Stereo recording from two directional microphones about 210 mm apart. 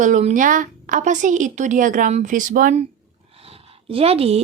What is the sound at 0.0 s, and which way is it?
A woman's voice, 35° right (ahead or behind).